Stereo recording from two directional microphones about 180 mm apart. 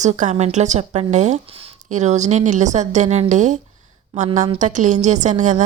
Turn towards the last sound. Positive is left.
turn(degrees=-40)  # may be behind; listen again after turning